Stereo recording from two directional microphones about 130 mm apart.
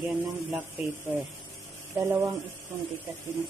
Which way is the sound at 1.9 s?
20° right (ahead or behind).